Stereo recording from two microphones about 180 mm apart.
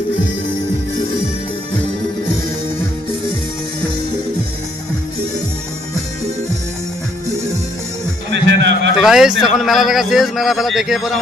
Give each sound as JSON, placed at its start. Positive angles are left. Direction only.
{"t": 8.3, "sound": "music", "side_deg": -75}
{"t": 9.0, "sound": "a man's voice", "side_deg": 0}